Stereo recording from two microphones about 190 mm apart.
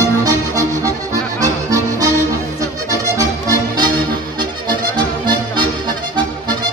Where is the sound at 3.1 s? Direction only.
20° right (ahead or behind).